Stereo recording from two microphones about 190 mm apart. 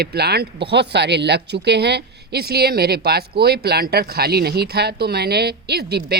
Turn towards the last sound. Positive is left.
turn(degrees=-55)  # may be behind; listen again after turning